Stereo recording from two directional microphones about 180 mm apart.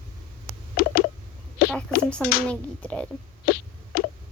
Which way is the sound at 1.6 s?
55° left (ahead or behind).